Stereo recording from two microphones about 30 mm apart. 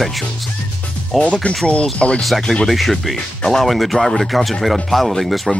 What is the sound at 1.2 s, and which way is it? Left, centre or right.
Speech, left.